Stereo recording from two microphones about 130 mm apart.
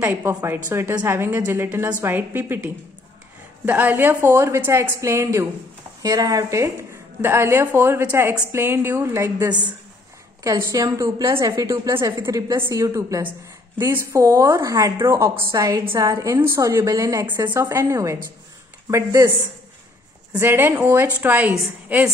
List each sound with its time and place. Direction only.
0.0 s a woman's voice: 15° right (ahead or behind)
20.3 s a woman's voice: 20° right (ahead or behind)